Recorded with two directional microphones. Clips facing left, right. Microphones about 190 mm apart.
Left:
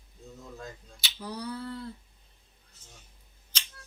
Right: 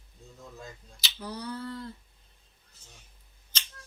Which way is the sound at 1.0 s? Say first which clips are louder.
Left 1 dB; 5° left (ahead or behind).